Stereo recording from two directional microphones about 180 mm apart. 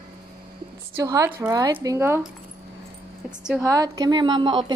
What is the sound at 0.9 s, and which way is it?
A woman's voice, 20° right (ahead or behind).